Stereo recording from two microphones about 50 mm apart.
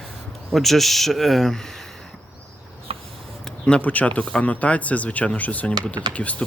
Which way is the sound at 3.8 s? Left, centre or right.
Left.